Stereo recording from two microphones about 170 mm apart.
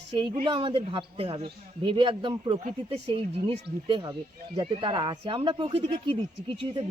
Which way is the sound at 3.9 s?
25° right (ahead or behind).